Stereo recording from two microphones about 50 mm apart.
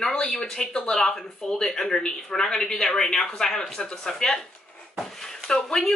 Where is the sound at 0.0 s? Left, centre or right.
Centre.